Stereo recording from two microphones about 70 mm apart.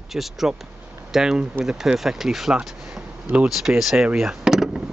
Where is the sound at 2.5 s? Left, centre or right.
Centre.